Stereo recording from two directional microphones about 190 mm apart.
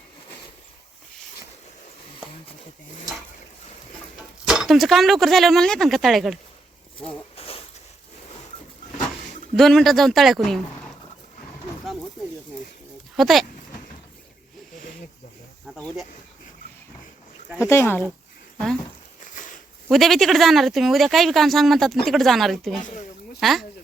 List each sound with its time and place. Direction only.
4.4 s speech: centre (ahead or behind)
7.1 s a sound: 30° left (ahead or behind)
9.6 s speech: centre (ahead or behind)
13.1 s speech: centre (ahead or behind)
15.6 s speech: centre (ahead or behind)
17.6 s speech: 15° left (ahead or behind)
19.3 s walk: 45° left (ahead or behind)
19.9 s speech: centre (ahead or behind)